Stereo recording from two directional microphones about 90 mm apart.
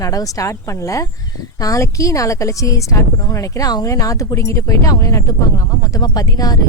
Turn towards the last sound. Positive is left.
turn(degrees=45)  # may be behind; listen again after turning